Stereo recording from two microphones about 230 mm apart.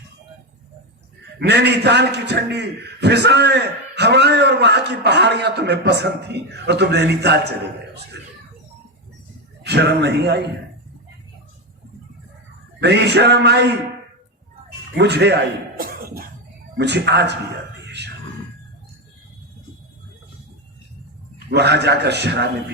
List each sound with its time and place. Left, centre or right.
1.4 s a man's voice: right
9.6 s a man's voice: right
12.8 s a man's voice: right
14.9 s a man's voice: right
17.8 s a sound: right
21.3 s a man's voice: right